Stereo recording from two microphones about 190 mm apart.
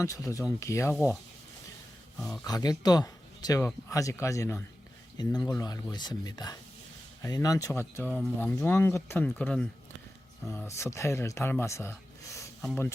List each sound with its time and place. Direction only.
0.0 s speech: 15° left (ahead or behind)
2.1 s speech: centre (ahead or behind)
2.4 s speech: 20° left (ahead or behind)